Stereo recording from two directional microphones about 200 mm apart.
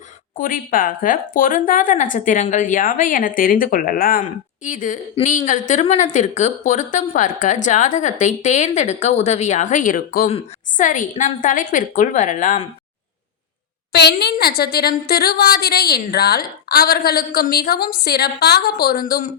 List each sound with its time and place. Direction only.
0.3 s a woman's voice: 45° left (ahead or behind)
13.9 s speech: 55° left (ahead or behind)